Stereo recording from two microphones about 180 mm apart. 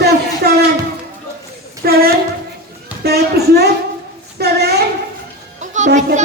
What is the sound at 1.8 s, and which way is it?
Speech, 60° right (ahead or behind).